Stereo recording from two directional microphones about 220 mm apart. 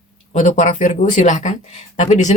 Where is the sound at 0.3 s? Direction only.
35° left (ahead or behind).